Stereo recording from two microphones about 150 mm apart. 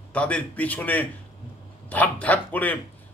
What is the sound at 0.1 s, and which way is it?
A man's voice, 10° left (ahead or behind).